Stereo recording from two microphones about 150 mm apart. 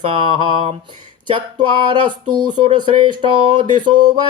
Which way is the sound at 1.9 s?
30° right (ahead or behind).